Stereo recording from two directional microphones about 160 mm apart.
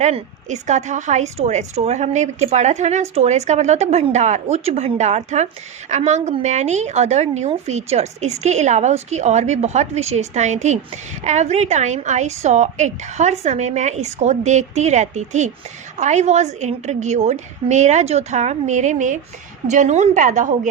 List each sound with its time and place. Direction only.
0.0 s speech: 45° right (ahead or behind)